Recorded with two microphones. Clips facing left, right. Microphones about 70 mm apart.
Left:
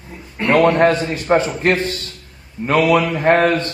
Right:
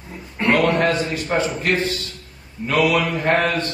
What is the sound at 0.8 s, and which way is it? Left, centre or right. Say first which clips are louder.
A man's voice: left 5 dB; left.